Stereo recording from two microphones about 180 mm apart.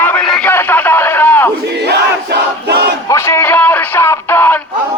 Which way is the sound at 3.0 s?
15° left (ahead or behind).